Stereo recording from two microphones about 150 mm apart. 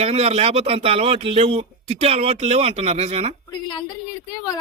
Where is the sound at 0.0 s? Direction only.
45° right (ahead or behind).